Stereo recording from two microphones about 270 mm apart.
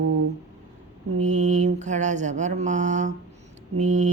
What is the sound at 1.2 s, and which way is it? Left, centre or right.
Mantra, right.